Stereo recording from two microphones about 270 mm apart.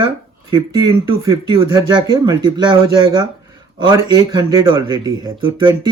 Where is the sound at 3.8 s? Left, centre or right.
Centre.